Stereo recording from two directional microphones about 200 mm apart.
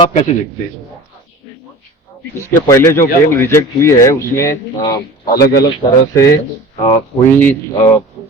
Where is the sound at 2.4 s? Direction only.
15° left (ahead or behind).